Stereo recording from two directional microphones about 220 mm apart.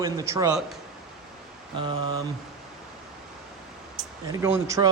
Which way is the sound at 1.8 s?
20° right (ahead or behind).